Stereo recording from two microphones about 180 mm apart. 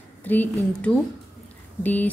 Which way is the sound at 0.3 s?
10° left (ahead or behind).